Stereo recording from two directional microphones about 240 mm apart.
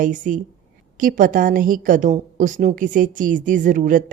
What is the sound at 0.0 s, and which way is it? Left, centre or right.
A woman's voice, right.